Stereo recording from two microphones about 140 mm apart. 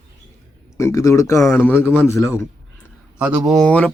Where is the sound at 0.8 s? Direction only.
20° left (ahead or behind).